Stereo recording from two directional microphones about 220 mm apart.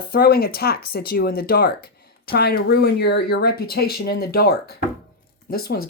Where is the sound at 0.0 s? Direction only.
45° left (ahead or behind).